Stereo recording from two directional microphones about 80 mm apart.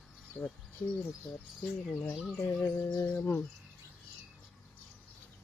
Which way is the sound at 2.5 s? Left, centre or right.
Left.